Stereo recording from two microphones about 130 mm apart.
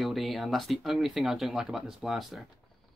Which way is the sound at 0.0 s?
Centre (ahead or behind).